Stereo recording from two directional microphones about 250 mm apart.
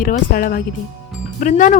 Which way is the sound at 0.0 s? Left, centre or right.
Left.